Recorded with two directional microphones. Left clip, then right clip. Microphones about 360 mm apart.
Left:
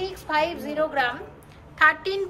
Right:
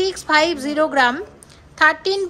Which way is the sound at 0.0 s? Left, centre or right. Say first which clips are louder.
Right 8 dB; centre.